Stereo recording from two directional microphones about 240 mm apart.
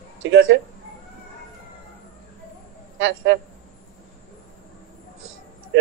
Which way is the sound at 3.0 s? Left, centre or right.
Right.